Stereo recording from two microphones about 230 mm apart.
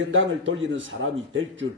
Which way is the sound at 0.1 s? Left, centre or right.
Right.